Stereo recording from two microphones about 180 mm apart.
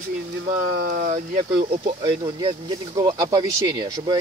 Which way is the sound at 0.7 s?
60° right (ahead or behind).